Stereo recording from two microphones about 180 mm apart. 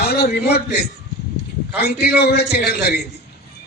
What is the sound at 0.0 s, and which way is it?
A man's voice, 60° left (ahead or behind).